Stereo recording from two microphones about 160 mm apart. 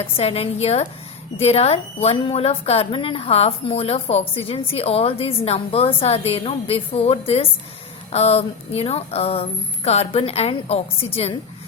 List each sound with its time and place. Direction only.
0.2 s a woman's voice: 40° left (ahead or behind)